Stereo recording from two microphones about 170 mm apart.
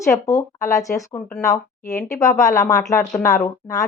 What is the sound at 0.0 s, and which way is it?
A woman's voice, 20° left (ahead or behind).